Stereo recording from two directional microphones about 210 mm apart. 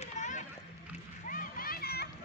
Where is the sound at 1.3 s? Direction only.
40° left (ahead or behind).